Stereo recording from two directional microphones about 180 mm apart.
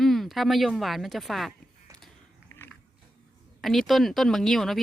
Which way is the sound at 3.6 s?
Centre (ahead or behind).